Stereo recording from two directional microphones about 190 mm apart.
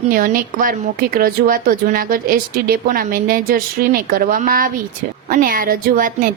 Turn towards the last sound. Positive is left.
turn(degrees=-45)  # may be behind; listen again after turning